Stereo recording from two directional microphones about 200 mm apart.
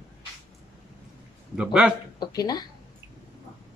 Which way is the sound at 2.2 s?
20° left (ahead or behind).